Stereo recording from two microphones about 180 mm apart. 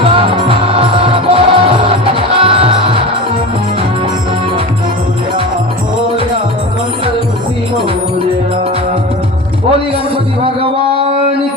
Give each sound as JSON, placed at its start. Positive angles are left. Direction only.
{"t": 0.0, "sound": "music", "side_deg": -30}
{"t": 10.4, "sound": "music", "side_deg": -30}